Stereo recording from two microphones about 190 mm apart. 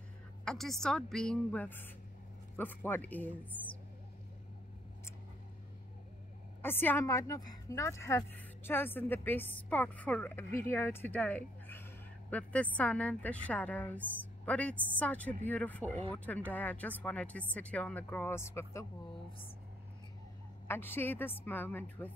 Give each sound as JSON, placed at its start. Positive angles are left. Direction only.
{"t": 0.5, "sound": "a woman's voice", "side_deg": 0}
{"t": 6.6, "sound": "a woman's voice", "side_deg": 10}
{"t": 20.6, "sound": "speech", "side_deg": 10}